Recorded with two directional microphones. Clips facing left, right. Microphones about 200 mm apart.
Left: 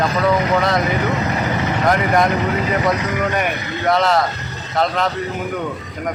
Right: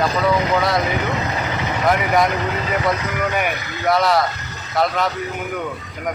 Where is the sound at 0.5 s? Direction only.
Centre (ahead or behind).